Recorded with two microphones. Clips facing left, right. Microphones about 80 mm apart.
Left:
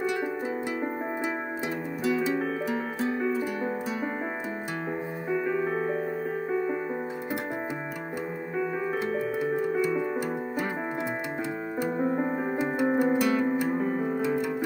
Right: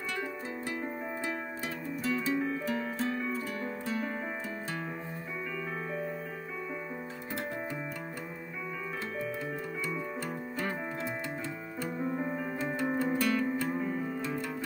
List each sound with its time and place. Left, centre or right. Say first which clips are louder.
2.0 s music: left 5 dB; centre
5.3 s music: left 12 dB; left
12.0 s music: left 5 dB; left
12.8 s music: left 6 dB; left
13.7 s music: left 6 dB; left
14.2 s music: left 8 dB; centre